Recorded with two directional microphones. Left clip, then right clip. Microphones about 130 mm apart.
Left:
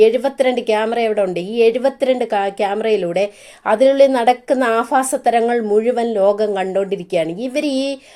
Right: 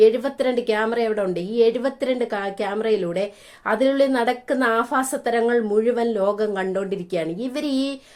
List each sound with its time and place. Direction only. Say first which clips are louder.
0.0 s a woman's voice: left 4 dB; 20° left (ahead or behind)